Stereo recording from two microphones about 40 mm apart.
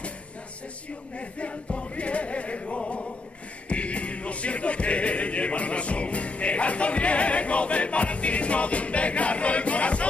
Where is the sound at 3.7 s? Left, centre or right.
Left.